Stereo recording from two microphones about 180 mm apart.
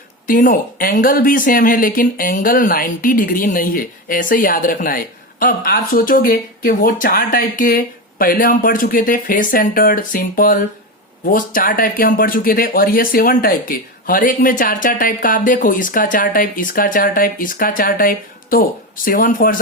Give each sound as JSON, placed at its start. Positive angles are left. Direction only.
{"t": 0.3, "sound": "speech", "side_deg": 50}